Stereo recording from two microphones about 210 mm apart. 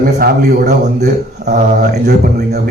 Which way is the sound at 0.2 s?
50° right (ahead or behind).